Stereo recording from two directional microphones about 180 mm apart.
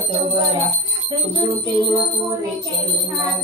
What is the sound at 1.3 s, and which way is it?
Music, 25° right (ahead or behind).